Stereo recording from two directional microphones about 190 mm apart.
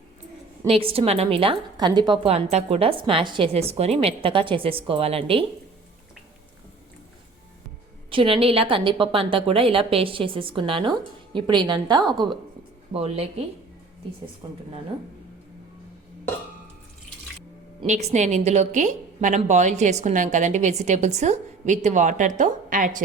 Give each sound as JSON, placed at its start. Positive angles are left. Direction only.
{"t": 0.7, "sound": "a woman's voice", "side_deg": -30}
{"t": 8.1, "sound": "a woman's voice", "side_deg": -30}
{"t": 17.8, "sound": "a woman's voice", "side_deg": -35}